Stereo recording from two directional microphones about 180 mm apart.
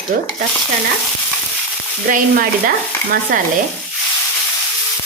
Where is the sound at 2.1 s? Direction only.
50° right (ahead or behind).